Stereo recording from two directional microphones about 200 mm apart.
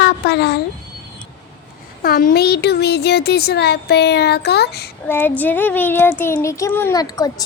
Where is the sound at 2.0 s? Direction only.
45° left (ahead or behind).